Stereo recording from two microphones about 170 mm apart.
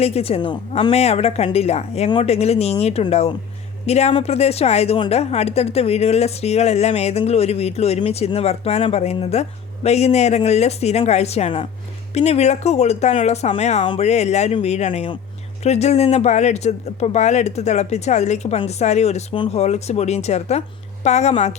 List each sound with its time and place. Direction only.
0.0 s a woman's voice: 35° left (ahead or behind)